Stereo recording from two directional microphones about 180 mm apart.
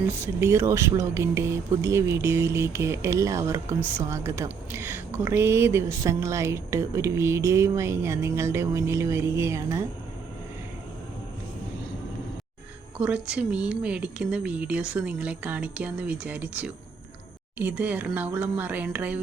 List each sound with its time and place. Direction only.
0.1 s speech: 15° right (ahead or behind)
13.0 s speech: 5° right (ahead or behind)